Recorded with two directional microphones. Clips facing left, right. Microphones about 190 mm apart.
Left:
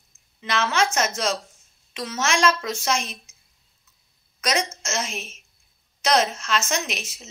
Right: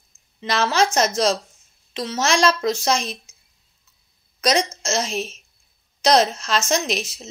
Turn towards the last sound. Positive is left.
turn(degrees=-35)  # may be behind; listen again after turning